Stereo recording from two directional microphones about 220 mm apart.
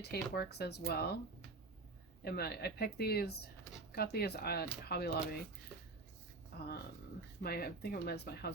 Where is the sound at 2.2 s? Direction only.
45° left (ahead or behind).